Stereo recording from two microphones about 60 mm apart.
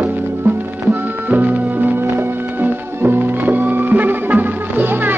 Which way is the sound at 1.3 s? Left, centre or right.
Right.